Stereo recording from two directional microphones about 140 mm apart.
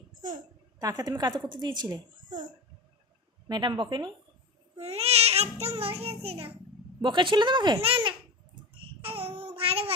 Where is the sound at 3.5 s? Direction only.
35° right (ahead or behind).